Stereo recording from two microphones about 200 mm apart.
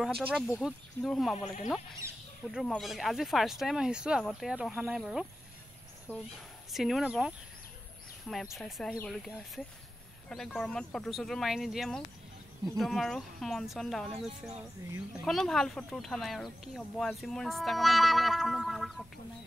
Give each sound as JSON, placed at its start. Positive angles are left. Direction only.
{"t": 0.0, "sound": "speech", "side_deg": 0}
{"t": 1.3, "sound": "speech", "side_deg": 35}
{"t": 2.0, "sound": "speech", "side_deg": -15}
{"t": 2.4, "sound": "speech", "side_deg": 0}
{"t": 6.1, "sound": "speech", "side_deg": 10}
{"t": 6.7, "sound": "speech", "side_deg": 0}